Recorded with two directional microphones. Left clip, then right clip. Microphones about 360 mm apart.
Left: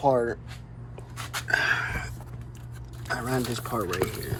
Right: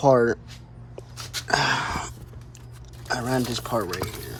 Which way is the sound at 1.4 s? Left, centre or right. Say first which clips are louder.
Right 2 dB; right.